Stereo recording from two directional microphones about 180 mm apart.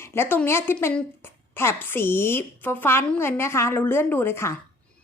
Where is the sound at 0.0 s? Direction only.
15° left (ahead or behind).